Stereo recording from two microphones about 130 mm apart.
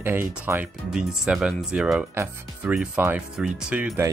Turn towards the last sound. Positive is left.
turn(degrees=-10)  # may be behind; listen again after turning